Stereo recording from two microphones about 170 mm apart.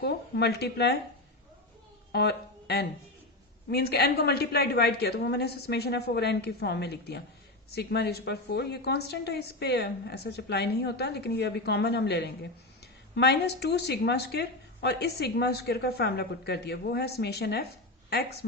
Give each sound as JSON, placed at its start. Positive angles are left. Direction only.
{"t": 0.0, "sound": "a woman's voice", "side_deg": 75}
{"t": 2.1, "sound": "a woman's voice", "side_deg": 70}